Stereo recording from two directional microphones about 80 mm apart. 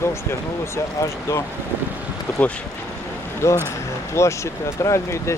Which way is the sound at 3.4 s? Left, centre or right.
Left.